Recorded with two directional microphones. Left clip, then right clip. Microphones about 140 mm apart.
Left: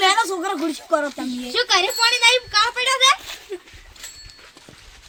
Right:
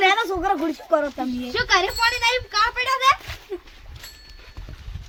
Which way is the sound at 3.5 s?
90° right.